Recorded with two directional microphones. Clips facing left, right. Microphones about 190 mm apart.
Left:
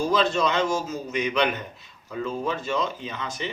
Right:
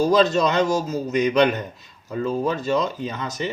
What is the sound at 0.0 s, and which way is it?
A man's voice, 40° right (ahead or behind).